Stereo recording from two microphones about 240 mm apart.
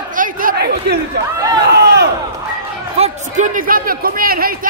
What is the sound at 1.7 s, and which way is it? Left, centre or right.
Crowd, right.